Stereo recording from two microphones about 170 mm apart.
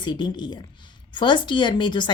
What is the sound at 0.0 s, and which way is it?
Speech, 25° left (ahead or behind).